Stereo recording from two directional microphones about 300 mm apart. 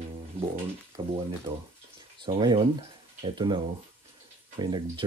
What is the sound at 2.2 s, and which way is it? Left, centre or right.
Speech, centre.